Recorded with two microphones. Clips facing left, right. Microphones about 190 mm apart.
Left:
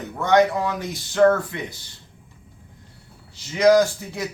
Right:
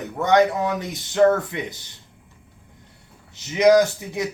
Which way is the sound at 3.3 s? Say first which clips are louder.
Right 1 dB; 20° right (ahead or behind).